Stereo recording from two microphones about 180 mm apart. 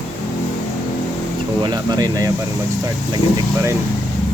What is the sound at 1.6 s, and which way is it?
Speech, 25° right (ahead or behind).